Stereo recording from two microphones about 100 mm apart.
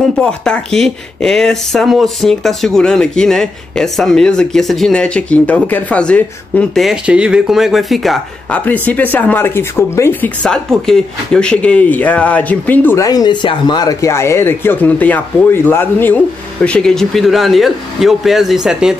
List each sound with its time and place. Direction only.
0.2 s speech: 5° left (ahead or behind)
6.7 s speech: centre (ahead or behind)
8.5 s speech: 15° left (ahead or behind)
10.4 s speech: 5° left (ahead or behind)
12.9 s speech: 35° left (ahead or behind); by 16.2 s 20° left (ahead or behind)
16.6 s speech: 10° left (ahead or behind)